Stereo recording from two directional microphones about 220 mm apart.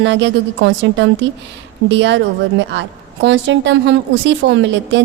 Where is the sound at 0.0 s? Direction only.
55° right (ahead or behind).